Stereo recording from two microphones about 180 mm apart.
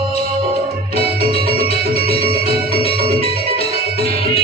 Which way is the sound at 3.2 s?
35° left (ahead or behind).